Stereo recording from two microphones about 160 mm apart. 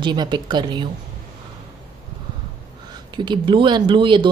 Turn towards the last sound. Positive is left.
turn(degrees=-30)  # may be behind; listen again after turning